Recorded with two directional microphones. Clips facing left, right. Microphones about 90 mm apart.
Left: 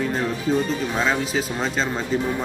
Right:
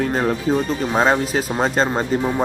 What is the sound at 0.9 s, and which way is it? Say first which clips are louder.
Speech: right 7 dB; 50° right (ahead or behind).